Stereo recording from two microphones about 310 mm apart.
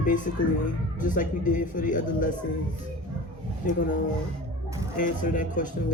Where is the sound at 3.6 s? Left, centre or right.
Left.